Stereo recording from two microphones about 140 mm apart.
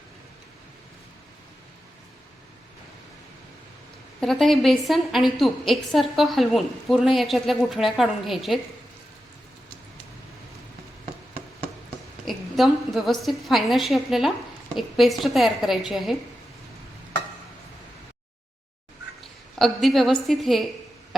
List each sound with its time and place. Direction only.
4.2 s a woman's voice: centre (ahead or behind)
12.2 s a woman's voice: centre (ahead or behind)
19.2 s a woman's voice: centre (ahead or behind)